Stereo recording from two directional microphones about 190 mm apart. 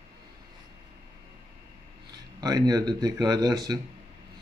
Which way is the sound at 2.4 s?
20° right (ahead or behind).